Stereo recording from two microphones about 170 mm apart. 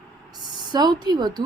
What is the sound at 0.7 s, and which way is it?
Speech, 25° right (ahead or behind).